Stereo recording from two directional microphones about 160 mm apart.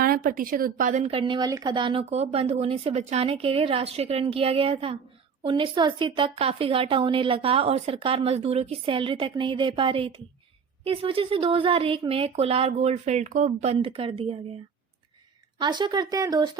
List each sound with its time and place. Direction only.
0.0 s speech: 65° right (ahead or behind); by 14.3 s 35° right (ahead or behind)
15.5 s speech: 25° right (ahead or behind)